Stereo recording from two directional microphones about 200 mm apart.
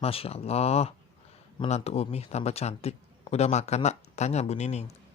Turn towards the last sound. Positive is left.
turn(degrees=35)  # may be behind; listen again after turning